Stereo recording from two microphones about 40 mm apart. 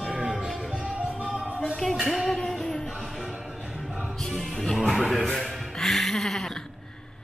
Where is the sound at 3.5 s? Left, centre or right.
Centre.